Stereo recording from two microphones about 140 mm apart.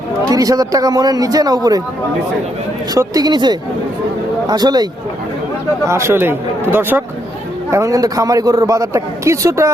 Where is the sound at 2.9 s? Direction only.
25° right (ahead or behind).